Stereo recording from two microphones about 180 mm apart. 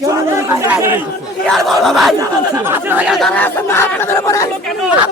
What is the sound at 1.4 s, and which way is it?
Speech, centre (ahead or behind).